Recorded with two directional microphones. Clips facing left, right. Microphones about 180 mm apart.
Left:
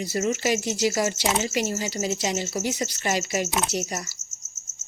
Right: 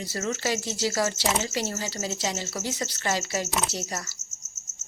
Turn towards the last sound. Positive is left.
turn(degrees=15)  # may be behind; listen again after turning